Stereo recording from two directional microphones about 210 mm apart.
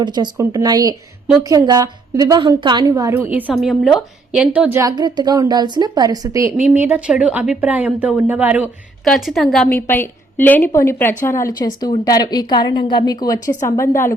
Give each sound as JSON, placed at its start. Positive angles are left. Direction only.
{"t": 0.0, "sound": "a woman's voice", "side_deg": -20}